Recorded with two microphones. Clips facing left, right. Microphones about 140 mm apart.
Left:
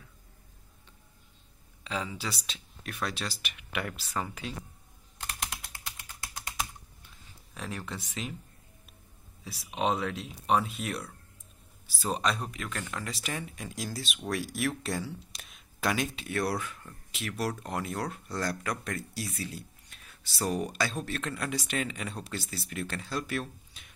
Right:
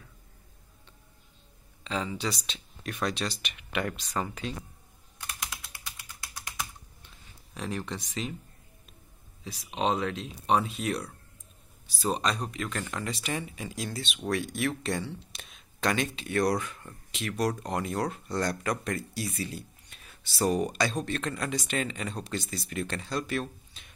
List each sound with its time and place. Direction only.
1.9 s speech: 10° left (ahead or behind)
5.4 s typing: 50° left (ahead or behind)
7.5 s speech: centre (ahead or behind)
9.4 s speech: 10° left (ahead or behind)